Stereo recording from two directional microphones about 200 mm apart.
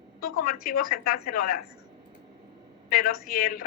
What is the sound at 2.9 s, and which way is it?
Speech, 45° left (ahead or behind).